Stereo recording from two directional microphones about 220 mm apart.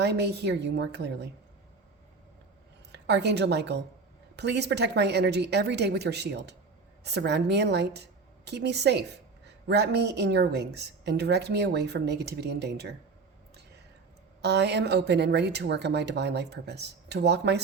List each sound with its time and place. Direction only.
0.0 s a woman's voice: 50° right (ahead or behind)
2.9 s a woman's voice: 50° right (ahead or behind)
14.4 s a woman's voice: 50° right (ahead or behind)